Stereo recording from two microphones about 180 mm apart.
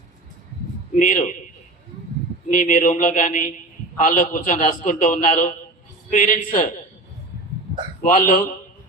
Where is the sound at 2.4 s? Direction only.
45° left (ahead or behind).